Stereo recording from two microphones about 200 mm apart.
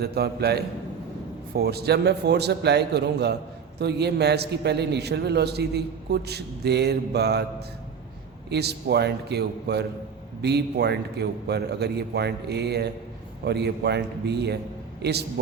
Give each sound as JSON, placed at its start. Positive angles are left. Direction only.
{"t": 0.0, "sound": "a man's voice", "side_deg": -55}
{"t": 8.4, "sound": "a man's voice", "side_deg": -55}